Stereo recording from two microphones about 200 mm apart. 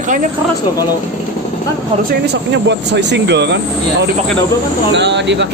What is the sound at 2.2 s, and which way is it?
Speech, 55° right (ahead or behind).